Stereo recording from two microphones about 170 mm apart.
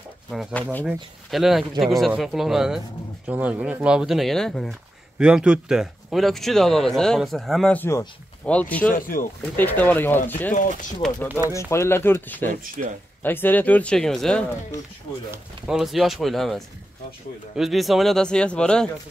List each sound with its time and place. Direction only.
0.3 s speech: 5° left (ahead or behind)
8.9 s speech: 55° left (ahead or behind)
9.6 s speech: 10° left (ahead or behind)
10.5 s speech: 50° left (ahead or behind)
11.5 s speech: 15° left (ahead or behind)
12.8 s speech: 50° right (ahead or behind)
13.2 s speech: 10° left (ahead or behind)